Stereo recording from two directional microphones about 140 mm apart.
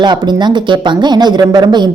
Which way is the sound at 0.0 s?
30° right (ahead or behind).